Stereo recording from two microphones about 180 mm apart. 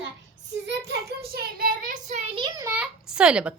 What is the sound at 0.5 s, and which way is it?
Child singing, 75° right (ahead or behind).